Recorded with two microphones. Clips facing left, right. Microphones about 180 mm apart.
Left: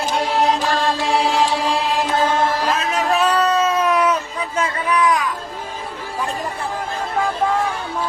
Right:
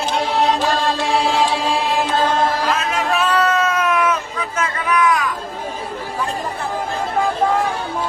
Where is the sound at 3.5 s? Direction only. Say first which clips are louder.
Left 1 dB; 30° left (ahead or behind).